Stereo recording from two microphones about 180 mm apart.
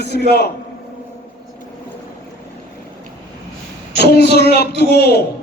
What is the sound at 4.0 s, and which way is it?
A man's voice, 60° left (ahead or behind).